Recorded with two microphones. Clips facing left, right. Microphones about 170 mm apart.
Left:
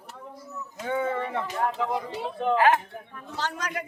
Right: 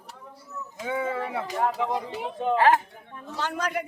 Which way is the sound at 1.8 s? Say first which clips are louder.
Even; 20° right (ahead or behind).